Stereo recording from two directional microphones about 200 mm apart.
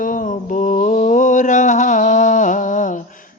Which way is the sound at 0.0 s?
40° left (ahead or behind).